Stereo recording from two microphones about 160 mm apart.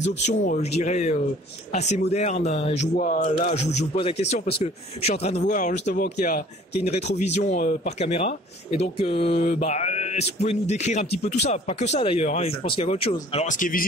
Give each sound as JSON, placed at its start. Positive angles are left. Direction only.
{"t": 0.2, "sound": "speech", "side_deg": 45}
{"t": 13.3, "sound": "speech", "side_deg": 50}